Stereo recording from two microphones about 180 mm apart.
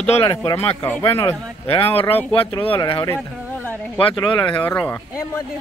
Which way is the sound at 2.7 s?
25° left (ahead or behind).